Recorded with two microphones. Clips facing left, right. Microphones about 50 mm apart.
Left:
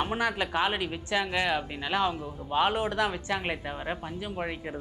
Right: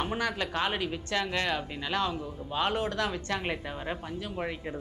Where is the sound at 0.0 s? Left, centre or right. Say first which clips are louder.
Left 2 dB; centre.